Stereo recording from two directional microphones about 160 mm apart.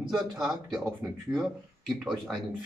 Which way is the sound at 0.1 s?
Centre (ahead or behind).